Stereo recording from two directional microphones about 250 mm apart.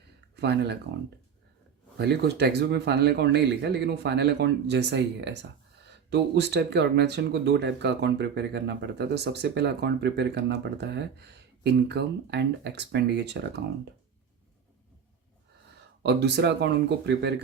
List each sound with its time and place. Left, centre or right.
0.3 s speech: right
2.0 s speech: right
16.0 s speech: right